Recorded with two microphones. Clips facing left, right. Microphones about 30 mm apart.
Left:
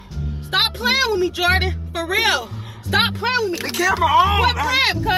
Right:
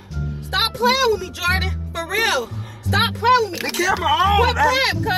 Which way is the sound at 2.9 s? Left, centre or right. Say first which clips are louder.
Right 2 dB; left.